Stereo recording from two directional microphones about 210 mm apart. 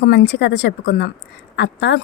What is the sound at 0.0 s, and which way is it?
Speech, 55° left (ahead or behind).